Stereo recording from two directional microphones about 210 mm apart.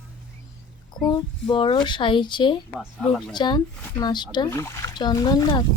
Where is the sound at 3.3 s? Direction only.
20° left (ahead or behind).